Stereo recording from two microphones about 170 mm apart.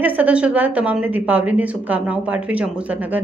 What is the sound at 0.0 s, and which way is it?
A woman's voice, 10° right (ahead or behind).